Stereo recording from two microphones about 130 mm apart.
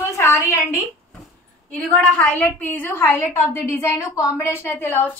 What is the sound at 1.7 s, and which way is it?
A woman's voice, 10° left (ahead or behind).